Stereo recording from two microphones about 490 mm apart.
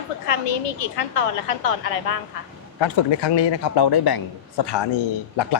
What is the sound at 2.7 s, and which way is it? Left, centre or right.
Speech, left.